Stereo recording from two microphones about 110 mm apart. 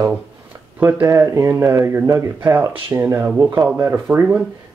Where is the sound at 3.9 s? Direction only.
10° right (ahead or behind).